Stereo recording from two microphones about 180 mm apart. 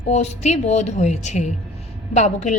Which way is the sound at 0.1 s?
40° left (ahead or behind).